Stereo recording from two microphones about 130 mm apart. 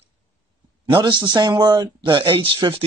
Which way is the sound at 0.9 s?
35° right (ahead or behind).